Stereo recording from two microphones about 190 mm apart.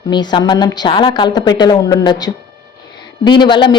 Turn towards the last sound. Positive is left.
turn(degrees=25)  # may be behind; listen again after turning